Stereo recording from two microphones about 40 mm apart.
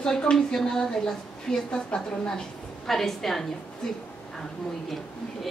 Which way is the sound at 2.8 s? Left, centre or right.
Centre.